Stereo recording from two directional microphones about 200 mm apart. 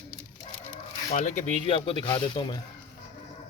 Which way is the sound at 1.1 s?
40° left (ahead or behind).